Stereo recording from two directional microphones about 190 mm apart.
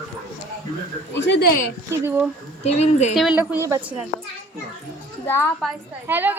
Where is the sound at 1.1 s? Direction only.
65° left (ahead or behind).